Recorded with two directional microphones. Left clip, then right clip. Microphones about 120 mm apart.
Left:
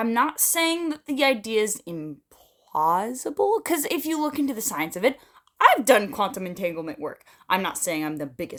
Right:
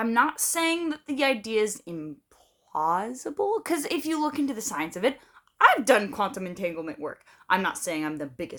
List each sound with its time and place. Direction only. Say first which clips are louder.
0.0 s speech: left 1 dB; 35° left (ahead or behind)